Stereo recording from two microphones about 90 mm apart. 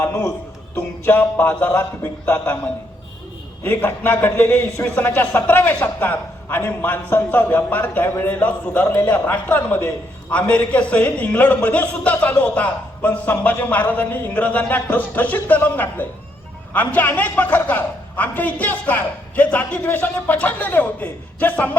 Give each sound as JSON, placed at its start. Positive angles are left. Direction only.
{"t": 0.0, "sound": "speech", "side_deg": 35}
{"t": 1.0, "sound": "a man's voice", "side_deg": 20}
{"t": 3.6, "sound": "a man's voice", "side_deg": 20}